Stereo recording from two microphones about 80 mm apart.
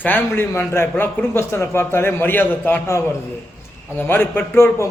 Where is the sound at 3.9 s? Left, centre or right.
Left.